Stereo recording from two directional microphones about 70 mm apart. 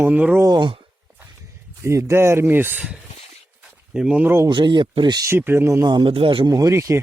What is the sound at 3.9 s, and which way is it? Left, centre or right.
Speech, centre.